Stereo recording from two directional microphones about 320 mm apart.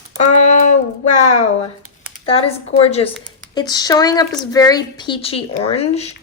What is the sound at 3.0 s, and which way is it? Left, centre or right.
Speech, centre.